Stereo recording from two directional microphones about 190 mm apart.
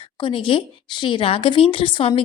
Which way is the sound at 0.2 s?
25° left (ahead or behind).